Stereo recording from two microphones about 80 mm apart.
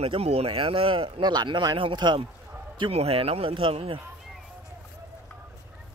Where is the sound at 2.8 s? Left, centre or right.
Right.